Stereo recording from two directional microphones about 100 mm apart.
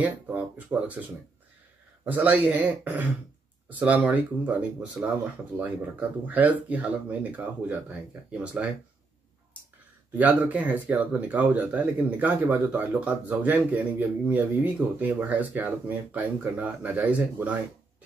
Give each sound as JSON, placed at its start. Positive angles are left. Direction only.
{"t": 0.0, "sound": "speech", "side_deg": -15}
{"t": 2.0, "sound": "speech", "side_deg": -15}
{"t": 10.1, "sound": "speech", "side_deg": -15}